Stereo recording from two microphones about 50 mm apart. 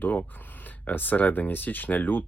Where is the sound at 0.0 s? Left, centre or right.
Left.